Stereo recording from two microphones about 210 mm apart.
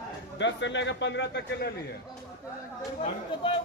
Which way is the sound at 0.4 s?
60° left (ahead or behind).